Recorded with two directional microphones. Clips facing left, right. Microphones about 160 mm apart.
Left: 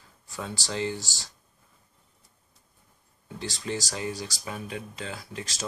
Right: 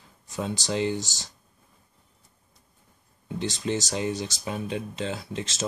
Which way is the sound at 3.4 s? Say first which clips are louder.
Right 5 dB; 20° right (ahead or behind).